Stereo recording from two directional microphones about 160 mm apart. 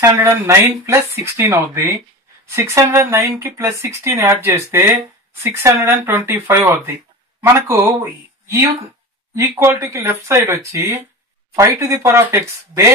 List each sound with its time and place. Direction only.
0.0 s speech: 15° right (ahead or behind)